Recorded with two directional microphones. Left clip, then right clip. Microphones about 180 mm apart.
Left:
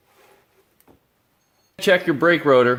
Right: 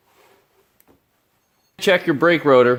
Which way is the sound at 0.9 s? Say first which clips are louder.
Left 2 dB; 25° left (ahead or behind).